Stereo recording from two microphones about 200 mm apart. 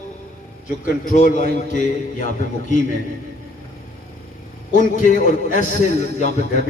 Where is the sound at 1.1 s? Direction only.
45° left (ahead or behind).